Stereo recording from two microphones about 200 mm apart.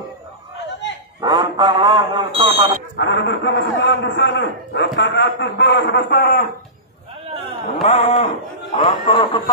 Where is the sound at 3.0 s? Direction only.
60° left (ahead or behind).